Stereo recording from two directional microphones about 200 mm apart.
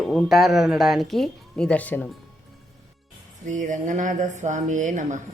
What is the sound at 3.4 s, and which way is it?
Speech, 40° right (ahead or behind).